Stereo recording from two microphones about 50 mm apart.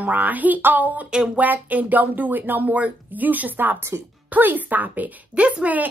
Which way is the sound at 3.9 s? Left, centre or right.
Right.